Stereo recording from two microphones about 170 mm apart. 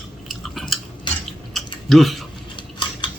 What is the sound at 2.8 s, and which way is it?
Cutlery, 25° left (ahead or behind).